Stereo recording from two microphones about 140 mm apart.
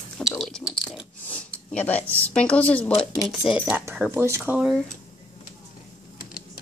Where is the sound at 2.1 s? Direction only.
10° left (ahead or behind).